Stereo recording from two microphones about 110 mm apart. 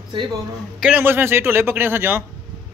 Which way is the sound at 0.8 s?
15° right (ahead or behind).